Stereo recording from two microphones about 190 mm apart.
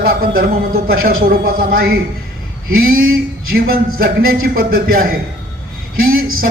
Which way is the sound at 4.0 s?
50° right (ahead or behind).